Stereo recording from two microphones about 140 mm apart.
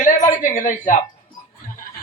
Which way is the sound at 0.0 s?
65° left (ahead or behind).